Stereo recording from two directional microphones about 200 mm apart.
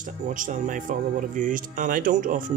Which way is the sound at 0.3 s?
40° right (ahead or behind).